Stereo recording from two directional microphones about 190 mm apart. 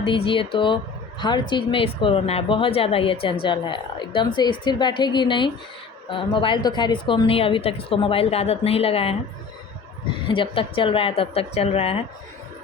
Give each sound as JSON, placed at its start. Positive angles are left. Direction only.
{"t": 0.0, "sound": "speech", "side_deg": 25}
{"t": 10.2, "sound": "speech", "side_deg": 25}